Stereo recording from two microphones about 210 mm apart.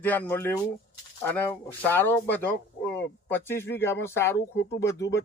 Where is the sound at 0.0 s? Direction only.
10° left (ahead or behind).